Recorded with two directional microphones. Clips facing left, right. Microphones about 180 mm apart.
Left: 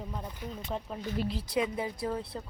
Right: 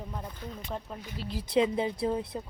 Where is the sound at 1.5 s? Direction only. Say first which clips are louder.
Right 7 dB; 25° right (ahead or behind).